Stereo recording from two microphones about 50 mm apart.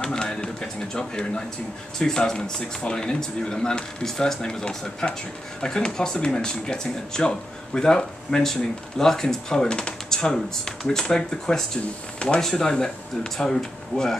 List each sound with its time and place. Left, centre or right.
0.0 s speech: centre